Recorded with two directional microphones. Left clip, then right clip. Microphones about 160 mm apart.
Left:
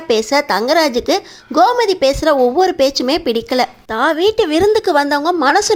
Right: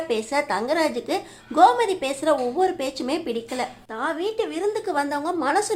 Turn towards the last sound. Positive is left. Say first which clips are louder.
# left 10 dB
turn(degrees=40)  # may be behind; listen again after turning